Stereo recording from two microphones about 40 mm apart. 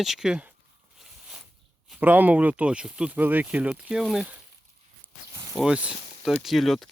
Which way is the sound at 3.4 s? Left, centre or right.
Right.